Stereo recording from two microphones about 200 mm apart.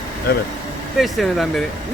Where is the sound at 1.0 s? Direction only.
Centre (ahead or behind).